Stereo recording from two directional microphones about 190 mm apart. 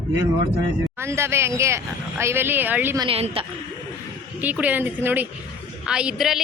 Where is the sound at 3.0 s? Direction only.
30° right (ahead or behind).